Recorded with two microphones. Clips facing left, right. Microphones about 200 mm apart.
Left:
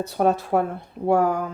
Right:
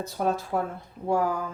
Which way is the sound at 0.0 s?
65° left (ahead or behind).